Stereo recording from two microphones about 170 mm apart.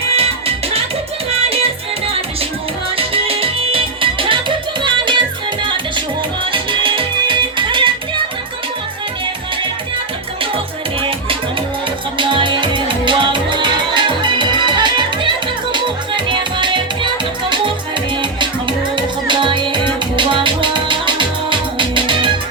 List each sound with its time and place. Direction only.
0.1 s music: 35° right (ahead or behind)
2.9 s music: 35° right (ahead or behind)
6.4 s music: 30° right (ahead or behind)
12.1 s music: 30° right (ahead or behind)
18.9 s music: 30° right (ahead or behind)